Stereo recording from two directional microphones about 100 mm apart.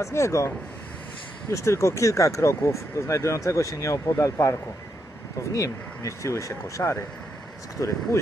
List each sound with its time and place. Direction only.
0.0 s speech: 30° left (ahead or behind)
1.5 s speech: 30° left (ahead or behind)